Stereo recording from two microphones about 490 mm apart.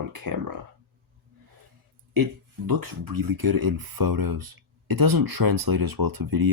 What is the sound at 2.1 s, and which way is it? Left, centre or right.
Speech, right.